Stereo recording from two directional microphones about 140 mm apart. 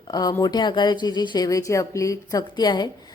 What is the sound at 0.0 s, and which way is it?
A woman's voice, 30° left (ahead or behind).